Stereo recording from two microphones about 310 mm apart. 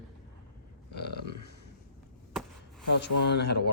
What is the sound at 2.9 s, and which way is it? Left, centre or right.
Speech, left.